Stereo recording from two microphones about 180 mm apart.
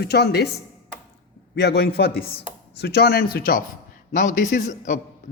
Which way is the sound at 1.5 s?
65° left (ahead or behind).